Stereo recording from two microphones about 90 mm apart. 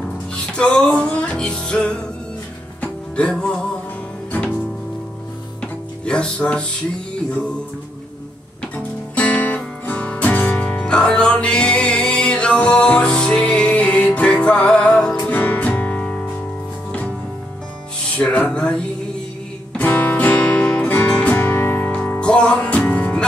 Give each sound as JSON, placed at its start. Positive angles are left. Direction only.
{"t": 0.5, "sound": "music", "side_deg": 10}
{"t": 5.6, "sound": "music", "side_deg": 10}
{"t": 8.7, "sound": "music", "side_deg": 20}
{"t": 18.1, "sound": "speech", "side_deg": 15}
{"t": 18.5, "sound": "music", "side_deg": 10}